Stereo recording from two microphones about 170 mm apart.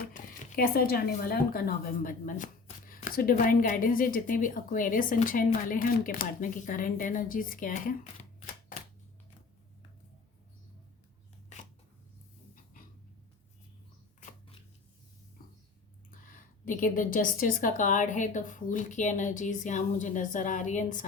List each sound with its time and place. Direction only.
0.0 s speech: 55° left (ahead or behind)
16.2 s speech: 55° left (ahead or behind)